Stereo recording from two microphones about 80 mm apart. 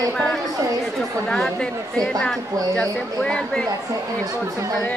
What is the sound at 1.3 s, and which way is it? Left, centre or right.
Speech, centre.